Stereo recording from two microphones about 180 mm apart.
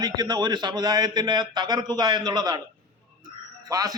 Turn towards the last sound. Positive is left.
turn(degrees=-20)  # may be behind; listen again after turning